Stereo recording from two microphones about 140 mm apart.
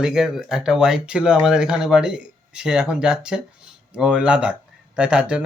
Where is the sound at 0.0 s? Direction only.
5° right (ahead or behind).